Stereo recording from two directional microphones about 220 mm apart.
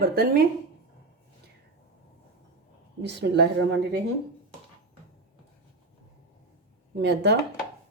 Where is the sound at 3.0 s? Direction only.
50° right (ahead or behind).